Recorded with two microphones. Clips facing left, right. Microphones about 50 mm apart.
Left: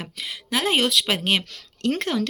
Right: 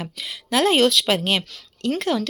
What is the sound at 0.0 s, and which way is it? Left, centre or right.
Speech, left.